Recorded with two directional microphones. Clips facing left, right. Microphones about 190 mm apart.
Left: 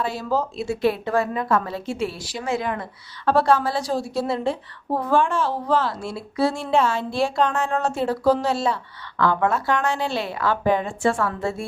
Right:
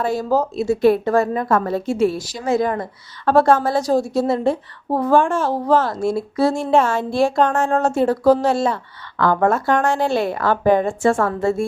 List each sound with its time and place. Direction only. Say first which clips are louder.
0.0 s a woman's voice: right 5 dB; 45° right (ahead or behind)